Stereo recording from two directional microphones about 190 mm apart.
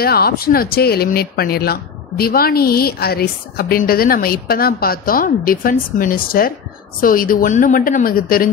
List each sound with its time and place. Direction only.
0.0 s speech: 55° left (ahead or behind)